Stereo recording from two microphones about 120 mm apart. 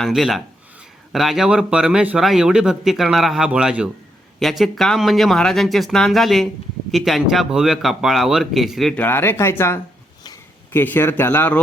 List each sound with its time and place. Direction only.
0.0 s speech: centre (ahead or behind)
9.0 s a man's voice: 15° left (ahead or behind)